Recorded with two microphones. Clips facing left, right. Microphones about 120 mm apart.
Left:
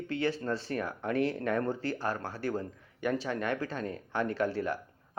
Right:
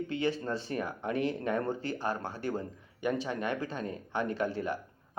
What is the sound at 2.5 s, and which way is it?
Speech, 15° right (ahead or behind).